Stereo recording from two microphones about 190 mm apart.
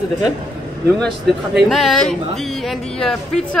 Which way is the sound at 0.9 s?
Centre (ahead or behind).